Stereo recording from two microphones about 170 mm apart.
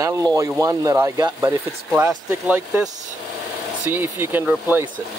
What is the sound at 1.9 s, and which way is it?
Speech, 10° right (ahead or behind).